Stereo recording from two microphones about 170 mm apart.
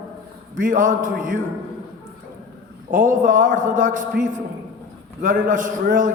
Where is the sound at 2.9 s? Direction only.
50° right (ahead or behind).